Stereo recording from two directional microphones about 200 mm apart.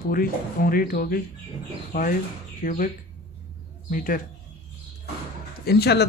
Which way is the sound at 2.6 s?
45° left (ahead or behind).